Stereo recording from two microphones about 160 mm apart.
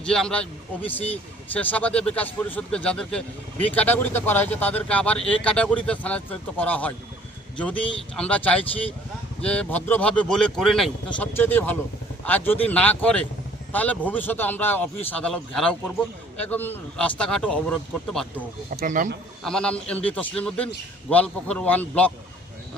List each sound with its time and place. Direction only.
0.0 s speech: 5° left (ahead or behind)
1.5 s speech: 10° left (ahead or behind)
18.8 s a man's voice: 55° right (ahead or behind)
19.5 s speech: 5° left (ahead or behind)